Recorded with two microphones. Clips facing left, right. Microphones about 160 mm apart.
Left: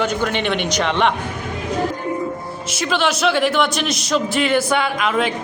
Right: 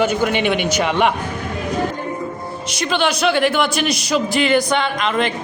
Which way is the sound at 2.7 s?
Centre (ahead or behind).